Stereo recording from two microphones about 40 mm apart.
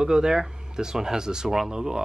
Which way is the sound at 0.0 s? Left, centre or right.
Centre.